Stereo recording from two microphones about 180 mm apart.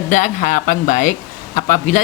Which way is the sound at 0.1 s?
45° left (ahead or behind).